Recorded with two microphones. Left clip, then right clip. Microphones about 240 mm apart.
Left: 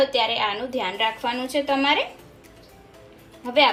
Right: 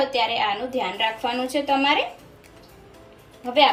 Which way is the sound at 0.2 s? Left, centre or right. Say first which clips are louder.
Even; centre.